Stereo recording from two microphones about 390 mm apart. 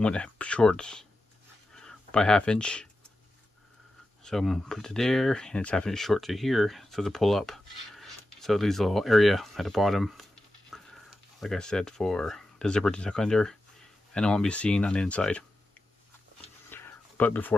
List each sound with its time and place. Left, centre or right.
0.0 s speech: centre
4.2 s speech: centre
16.3 s a sound: centre